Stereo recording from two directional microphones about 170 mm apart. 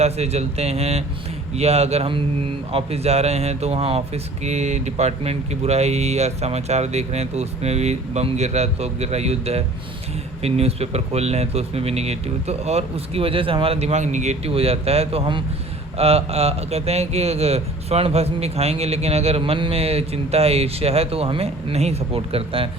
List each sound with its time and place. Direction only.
0.0 s speech: 40° right (ahead or behind)